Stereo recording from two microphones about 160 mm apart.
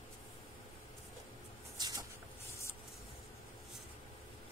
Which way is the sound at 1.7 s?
25° right (ahead or behind).